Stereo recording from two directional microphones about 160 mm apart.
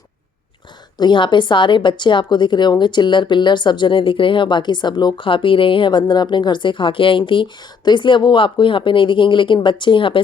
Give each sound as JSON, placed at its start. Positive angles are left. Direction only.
{"t": 0.9, "sound": "a woman's voice", "side_deg": 30}